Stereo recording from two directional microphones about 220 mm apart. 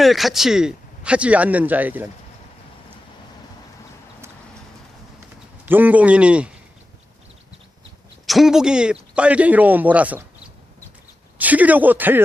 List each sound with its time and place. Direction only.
0.0 s speech: centre (ahead or behind)
5.6 s a man's voice: 10° right (ahead or behind)
8.3 s a man's voice: centre (ahead or behind)